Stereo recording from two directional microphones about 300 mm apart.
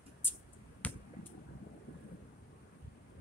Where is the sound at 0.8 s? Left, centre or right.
Centre.